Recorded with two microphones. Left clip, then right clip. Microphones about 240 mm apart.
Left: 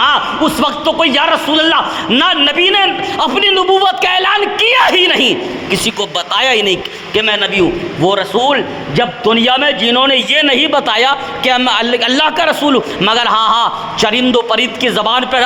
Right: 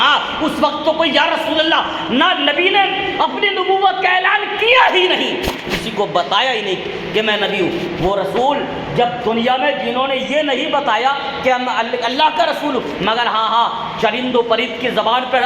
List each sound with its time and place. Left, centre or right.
0.0 s a man's voice: left
7.2 s a man's voice: left
10.8 s a man's voice: left
12.0 s a man's voice: left